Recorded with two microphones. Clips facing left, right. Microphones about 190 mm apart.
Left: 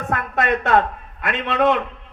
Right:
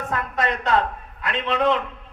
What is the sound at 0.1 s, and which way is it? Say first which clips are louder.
A man's voice: left 5 dB; 65° left (ahead or behind).